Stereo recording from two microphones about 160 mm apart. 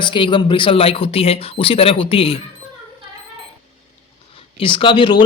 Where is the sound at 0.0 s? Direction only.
30° left (ahead or behind).